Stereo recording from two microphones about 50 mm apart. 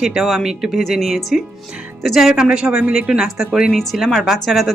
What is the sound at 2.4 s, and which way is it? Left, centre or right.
Speech, centre.